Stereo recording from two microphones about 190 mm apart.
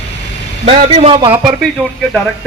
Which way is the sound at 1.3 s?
5° right (ahead or behind).